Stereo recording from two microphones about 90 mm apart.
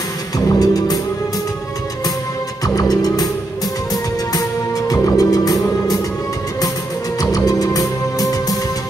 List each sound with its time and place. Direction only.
0.5 s music: 45° left (ahead or behind)
2.6 s music: 40° left (ahead or behind)
7.2 s music: 40° left (ahead or behind)